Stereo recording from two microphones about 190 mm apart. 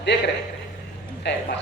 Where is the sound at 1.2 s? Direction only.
65° left (ahead or behind).